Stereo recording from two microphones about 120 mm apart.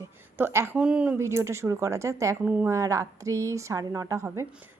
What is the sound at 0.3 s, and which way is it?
Speech, 20° right (ahead or behind).